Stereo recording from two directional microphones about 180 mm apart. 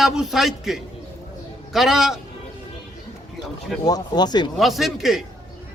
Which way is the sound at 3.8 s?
20° left (ahead or behind).